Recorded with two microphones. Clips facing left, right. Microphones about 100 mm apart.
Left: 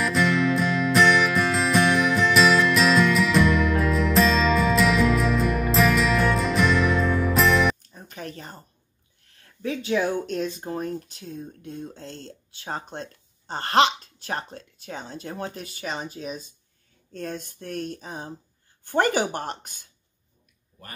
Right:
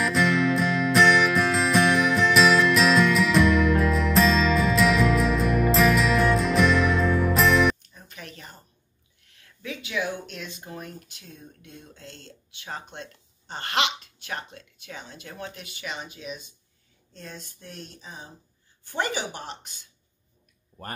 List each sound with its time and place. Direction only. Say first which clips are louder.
0.0 s music: even; centre (ahead or behind)
7.9 s music: left 6 dB; 35° left (ahead or behind)
9.2 s speech: left 9 dB; 35° left (ahead or behind)
17.1 s speech: left 9 dB; 55° left (ahead or behind)